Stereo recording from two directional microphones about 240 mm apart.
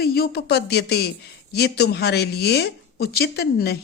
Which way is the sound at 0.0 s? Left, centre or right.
Left.